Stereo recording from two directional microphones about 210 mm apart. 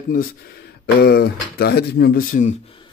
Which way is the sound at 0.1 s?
45° left (ahead or behind).